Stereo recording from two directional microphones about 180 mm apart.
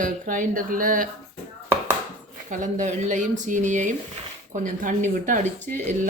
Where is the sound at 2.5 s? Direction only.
45° right (ahead or behind).